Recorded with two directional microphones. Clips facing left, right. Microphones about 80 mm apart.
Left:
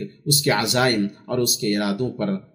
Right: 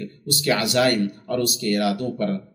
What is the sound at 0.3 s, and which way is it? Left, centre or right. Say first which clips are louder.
A man's voice: left 1 dB; left.